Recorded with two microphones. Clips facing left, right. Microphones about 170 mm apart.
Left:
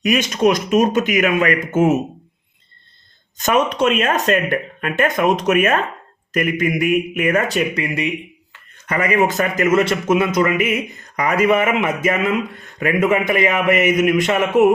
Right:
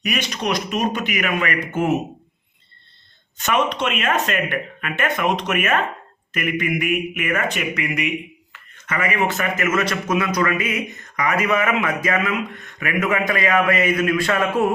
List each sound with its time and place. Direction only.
0.0 s speech: 45° left (ahead or behind)
3.3 s speech: 40° left (ahead or behind); by 14.7 s 20° left (ahead or behind)